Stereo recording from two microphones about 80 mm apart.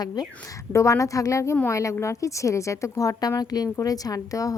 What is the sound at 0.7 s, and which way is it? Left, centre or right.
A woman's voice, left.